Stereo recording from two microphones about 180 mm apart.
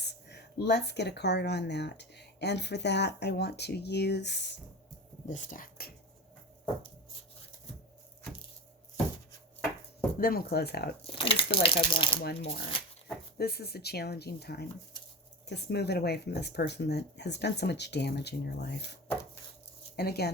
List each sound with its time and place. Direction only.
0.0 s speech: 70° left (ahead or behind)
5.3 s speech: 45° left (ahead or behind)
10.2 s speech: 55° left (ahead or behind)
11.0 s speech: 30° left (ahead or behind)
12.2 s speech: 65° left (ahead or behind)
20.0 s speech: 65° left (ahead or behind)